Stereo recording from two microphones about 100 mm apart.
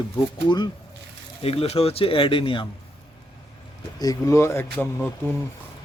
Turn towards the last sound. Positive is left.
turn(degrees=15)  # may be behind; listen again after turning